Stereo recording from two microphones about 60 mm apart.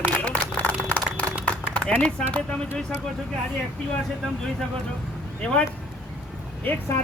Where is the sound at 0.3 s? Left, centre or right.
Left.